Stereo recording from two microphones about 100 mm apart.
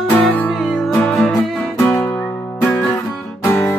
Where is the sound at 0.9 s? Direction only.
15° left (ahead or behind).